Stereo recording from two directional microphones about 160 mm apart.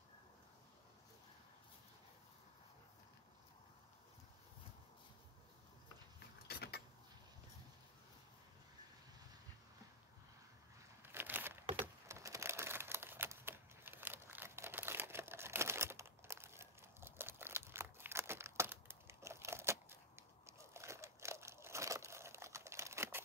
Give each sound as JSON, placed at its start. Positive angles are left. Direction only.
{"t": 6.4, "sound": "vehicle", "side_deg": 80}
{"t": 11.0, "sound": "a sound", "side_deg": -15}
{"t": 11.8, "sound": "crumpling", "side_deg": -20}
{"t": 20.4, "sound": "crushing", "side_deg": -15}